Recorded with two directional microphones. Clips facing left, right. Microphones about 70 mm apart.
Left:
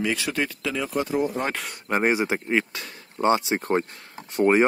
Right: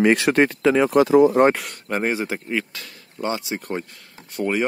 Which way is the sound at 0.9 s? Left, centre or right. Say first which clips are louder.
Right 9 dB; right.